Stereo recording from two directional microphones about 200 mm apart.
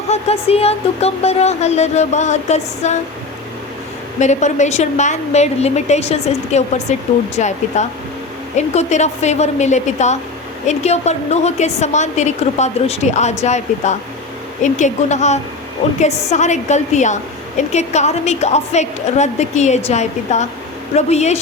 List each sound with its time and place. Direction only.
0.1 s speech: 30° left (ahead or behind)
4.2 s speech: 35° left (ahead or behind)